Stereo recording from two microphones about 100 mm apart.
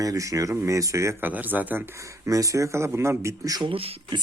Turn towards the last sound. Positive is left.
turn(degrees=-70)  # may be behind; listen again after turning